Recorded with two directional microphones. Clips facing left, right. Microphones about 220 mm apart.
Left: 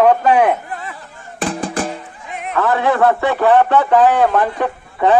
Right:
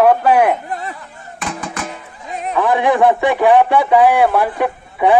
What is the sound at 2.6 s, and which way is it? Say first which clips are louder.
Speech: right 1 dB; 15° right (ahead or behind).